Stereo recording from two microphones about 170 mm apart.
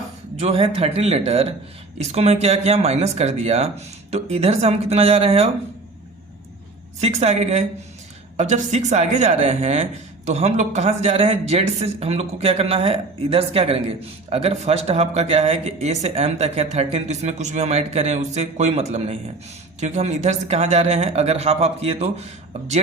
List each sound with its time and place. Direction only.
0.3 s speech: 35° right (ahead or behind)
7.0 s speech: 40° right (ahead or behind)